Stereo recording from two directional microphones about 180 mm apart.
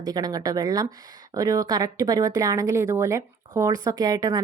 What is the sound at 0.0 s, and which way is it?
Speech, 20° right (ahead or behind).